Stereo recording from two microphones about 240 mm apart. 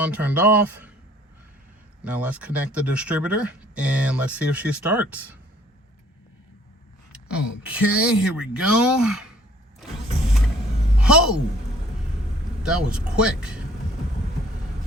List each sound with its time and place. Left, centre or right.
0.0 s speech: centre
2.0 s speech: centre
7.1 s speech: centre
11.0 s a woman's voice: centre
12.7 s speech: centre